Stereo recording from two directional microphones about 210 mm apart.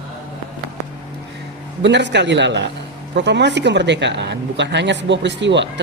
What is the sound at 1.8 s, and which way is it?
A woman's voice, 55° right (ahead or behind).